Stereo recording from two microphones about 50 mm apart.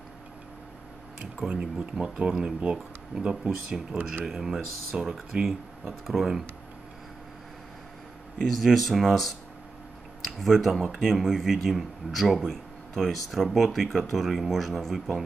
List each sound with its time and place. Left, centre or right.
1.5 s speech: centre
6.0 s speech: centre
8.4 s speech: centre